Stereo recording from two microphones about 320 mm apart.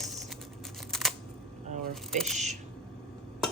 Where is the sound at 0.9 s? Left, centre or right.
Centre.